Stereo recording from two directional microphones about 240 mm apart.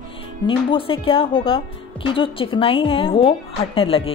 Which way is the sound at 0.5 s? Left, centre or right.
Left.